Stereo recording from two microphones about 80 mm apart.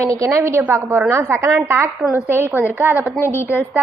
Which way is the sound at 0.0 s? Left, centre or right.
Right.